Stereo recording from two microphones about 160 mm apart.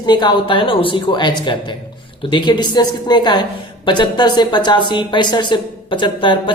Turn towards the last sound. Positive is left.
turn(degrees=30)  # may be behind; listen again after turning